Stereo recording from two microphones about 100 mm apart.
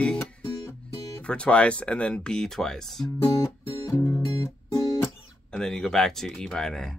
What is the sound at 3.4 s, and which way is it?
Music, 30° left (ahead or behind).